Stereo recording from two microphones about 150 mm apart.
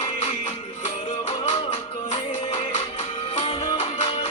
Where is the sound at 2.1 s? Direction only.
45° left (ahead or behind).